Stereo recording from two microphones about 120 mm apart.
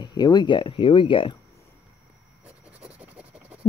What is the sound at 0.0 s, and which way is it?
Speech, 35° left (ahead or behind).